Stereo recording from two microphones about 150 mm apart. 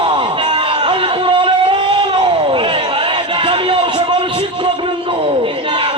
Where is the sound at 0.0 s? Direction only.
35° right (ahead or behind).